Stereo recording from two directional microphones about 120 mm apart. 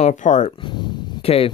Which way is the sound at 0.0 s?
85° left.